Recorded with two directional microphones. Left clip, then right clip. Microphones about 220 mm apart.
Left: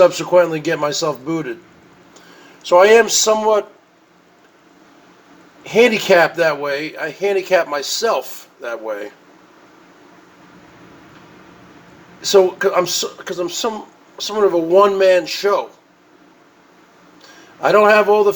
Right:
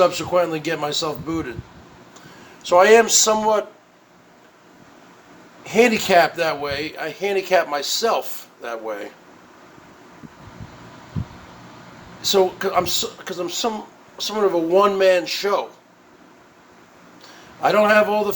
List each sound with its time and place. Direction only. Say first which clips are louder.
0.0 s speech: left 6 dB; 20° right (ahead or behind)
2.6 s speech: left 3 dB; 15° right (ahead or behind)
5.6 s speech: left 4 dB; 20° right (ahead or behind)
12.2 s speech: left 5 dB; 20° right (ahead or behind)
17.6 s speech: left 4 dB; 20° right (ahead or behind)